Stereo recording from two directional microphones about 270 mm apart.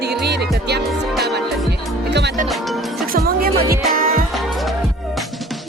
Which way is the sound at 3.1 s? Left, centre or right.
Right.